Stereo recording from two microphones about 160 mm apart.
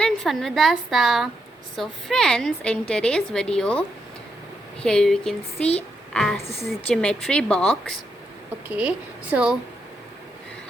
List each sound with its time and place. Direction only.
0.0 s a woman's voice: 5° left (ahead or behind)
5.5 s a woman's voice: 40° left (ahead or behind)
6.1 s a woman's voice: 5° left (ahead or behind)
8.6 s speech: 10° right (ahead or behind)